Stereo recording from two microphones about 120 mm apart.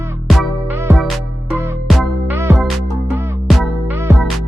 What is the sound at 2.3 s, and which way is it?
Music, 20° right (ahead or behind).